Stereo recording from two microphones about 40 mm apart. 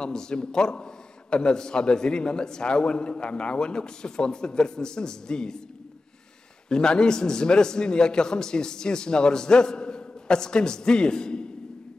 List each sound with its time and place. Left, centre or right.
0.0 s a man's voice: centre
6.7 s a man's voice: left